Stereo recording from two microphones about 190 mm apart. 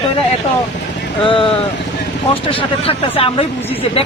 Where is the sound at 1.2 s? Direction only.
25° left (ahead or behind).